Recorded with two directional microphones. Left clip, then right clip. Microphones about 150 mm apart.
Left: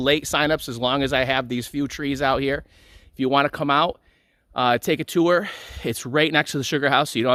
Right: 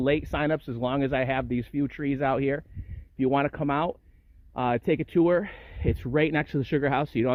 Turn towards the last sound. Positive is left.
turn(degrees=25)  # may be behind; listen again after turning